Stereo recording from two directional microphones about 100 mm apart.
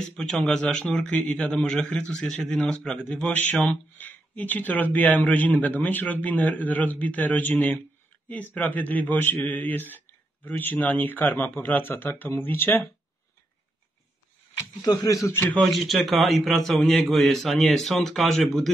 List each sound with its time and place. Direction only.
0.1 s a man's voice: 10° left (ahead or behind)
14.8 s speech: 35° left (ahead or behind)
15.5 s a man's voice: centre (ahead or behind)